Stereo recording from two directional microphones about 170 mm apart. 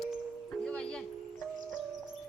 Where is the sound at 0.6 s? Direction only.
5° left (ahead or behind).